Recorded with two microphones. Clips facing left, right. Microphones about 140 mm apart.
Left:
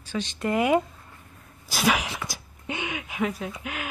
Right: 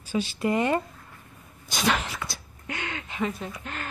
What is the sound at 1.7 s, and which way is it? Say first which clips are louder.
Speech: left 2 dB; 5° left (ahead or behind).